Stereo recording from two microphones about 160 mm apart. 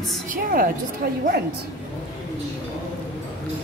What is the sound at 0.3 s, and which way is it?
Speech, 60° right (ahead or behind).